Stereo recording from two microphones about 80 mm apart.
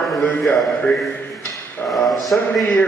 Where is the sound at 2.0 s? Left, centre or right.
Centre.